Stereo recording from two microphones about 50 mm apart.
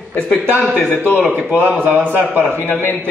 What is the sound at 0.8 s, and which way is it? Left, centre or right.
Speech, left.